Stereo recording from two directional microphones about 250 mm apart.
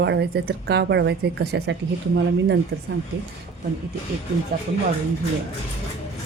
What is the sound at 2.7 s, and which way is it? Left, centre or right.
Speech, right.